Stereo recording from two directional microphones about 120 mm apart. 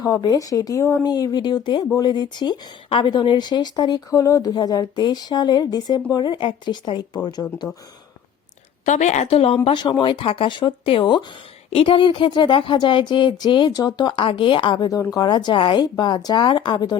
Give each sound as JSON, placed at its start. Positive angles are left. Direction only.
{"t": 0.0, "sound": "a woman's voice", "side_deg": 30}
{"t": 8.8, "sound": "a woman's voice", "side_deg": 80}
{"t": 9.6, "sound": "a woman's voice", "side_deg": 40}
{"t": 14.8, "sound": "a woman's voice", "side_deg": 30}